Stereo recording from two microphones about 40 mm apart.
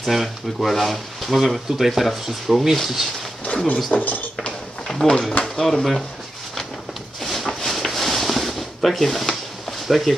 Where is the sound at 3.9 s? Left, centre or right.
Left.